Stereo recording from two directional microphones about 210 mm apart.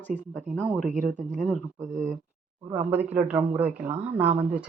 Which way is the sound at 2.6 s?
10° right (ahead or behind).